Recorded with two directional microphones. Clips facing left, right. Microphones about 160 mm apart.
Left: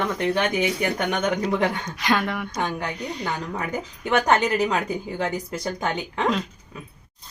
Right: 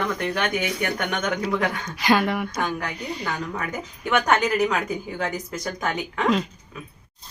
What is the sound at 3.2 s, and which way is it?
A woman's voice, 30° left (ahead or behind).